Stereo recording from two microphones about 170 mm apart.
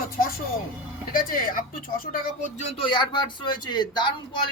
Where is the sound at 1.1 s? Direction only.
55° left (ahead or behind).